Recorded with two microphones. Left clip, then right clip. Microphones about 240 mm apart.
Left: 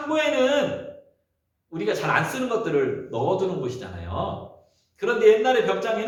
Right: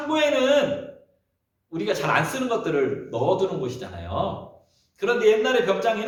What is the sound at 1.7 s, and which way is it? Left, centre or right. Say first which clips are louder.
Speech: even; centre.